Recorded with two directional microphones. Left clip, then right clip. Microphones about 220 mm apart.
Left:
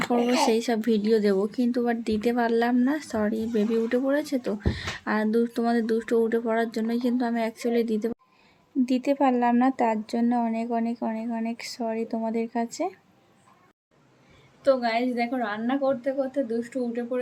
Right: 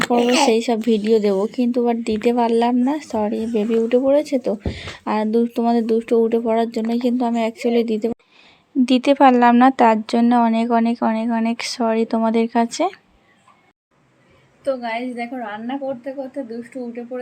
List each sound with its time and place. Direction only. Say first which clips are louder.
0.2 s speech: right 8 dB; 50° right (ahead or behind)
0.4 s a woman's voice: right 7 dB; 15° right (ahead or behind)
14.6 s a woman's voice: even; centre (ahead or behind)